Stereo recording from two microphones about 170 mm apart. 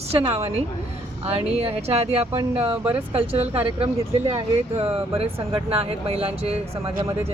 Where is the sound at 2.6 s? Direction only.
10° right (ahead or behind).